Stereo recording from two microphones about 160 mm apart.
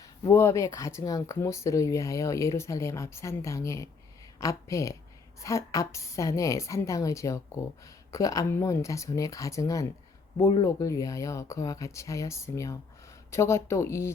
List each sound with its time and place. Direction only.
0.0 s speech: 20° left (ahead or behind)